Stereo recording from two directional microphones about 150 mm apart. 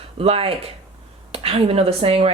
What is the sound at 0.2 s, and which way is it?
A woman's voice, 40° right (ahead or behind).